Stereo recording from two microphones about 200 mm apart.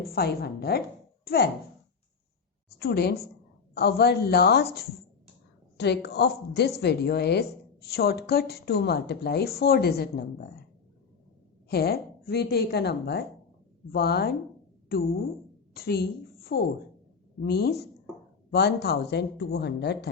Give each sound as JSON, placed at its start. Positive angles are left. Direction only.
{"t": 0.0, "sound": "a woman's voice", "side_deg": 50}
{"t": 2.7, "sound": "a woman's voice", "side_deg": 55}
{"t": 5.7, "sound": "a woman's voice", "side_deg": 55}
{"t": 11.7, "sound": "a woman's voice", "side_deg": 50}
{"t": 15.7, "sound": "a woman's voice", "side_deg": 50}